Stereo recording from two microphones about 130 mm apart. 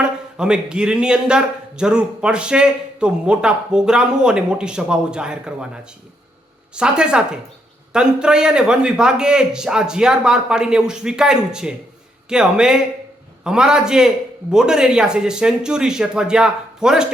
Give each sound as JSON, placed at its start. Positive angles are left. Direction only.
{"t": 0.0, "sound": "a man's voice", "side_deg": -5}